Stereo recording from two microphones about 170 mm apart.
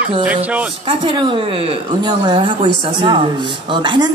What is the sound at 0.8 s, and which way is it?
A man's voice, 30° right (ahead or behind).